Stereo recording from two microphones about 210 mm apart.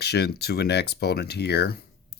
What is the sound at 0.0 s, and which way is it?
Speech, 50° left (ahead or behind).